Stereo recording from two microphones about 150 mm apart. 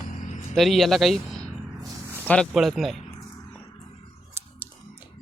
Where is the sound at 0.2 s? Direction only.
55° left (ahead or behind).